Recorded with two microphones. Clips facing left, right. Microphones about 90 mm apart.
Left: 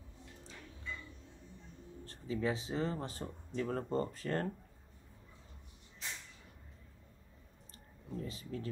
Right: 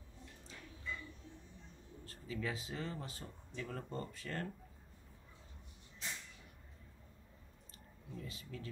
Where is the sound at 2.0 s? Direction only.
35° left (ahead or behind).